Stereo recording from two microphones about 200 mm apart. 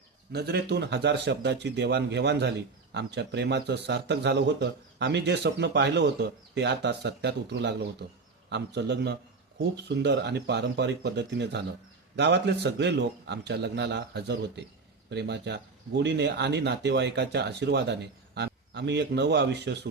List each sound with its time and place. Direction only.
0.3 s a man's voice: 55° right (ahead or behind)